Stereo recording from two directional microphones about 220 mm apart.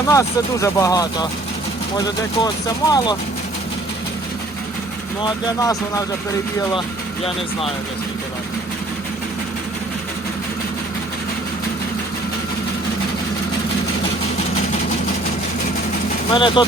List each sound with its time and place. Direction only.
0.1 s speech: 15° left (ahead or behind)
5.2 s speech: 15° left (ahead or behind)
16.3 s speech: 20° left (ahead or behind)